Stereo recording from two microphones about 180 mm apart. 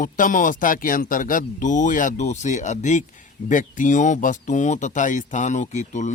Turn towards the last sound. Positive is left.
turn(degrees=40)  # may be behind; listen again after turning